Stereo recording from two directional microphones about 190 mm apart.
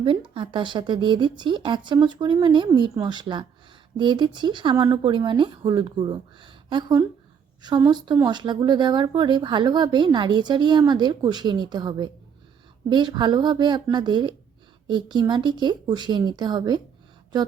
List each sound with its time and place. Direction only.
0.0 s speech: 25° right (ahead or behind)